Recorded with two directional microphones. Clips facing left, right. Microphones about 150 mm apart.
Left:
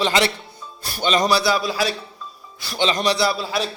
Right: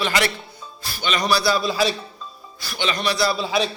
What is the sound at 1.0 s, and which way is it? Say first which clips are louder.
Speech: left 5 dB; 40° left (ahead or behind).